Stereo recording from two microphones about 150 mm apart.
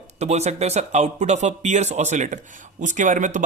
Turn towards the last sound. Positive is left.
turn(degrees=-55)  # may be behind; listen again after turning